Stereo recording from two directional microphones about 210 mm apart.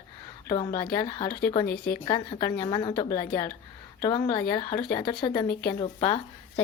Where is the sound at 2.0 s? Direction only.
20° left (ahead or behind).